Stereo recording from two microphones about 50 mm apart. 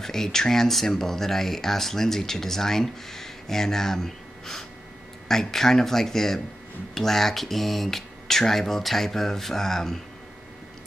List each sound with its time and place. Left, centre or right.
0.0 s speech: centre